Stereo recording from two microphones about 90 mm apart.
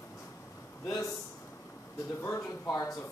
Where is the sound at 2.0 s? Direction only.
30° left (ahead or behind).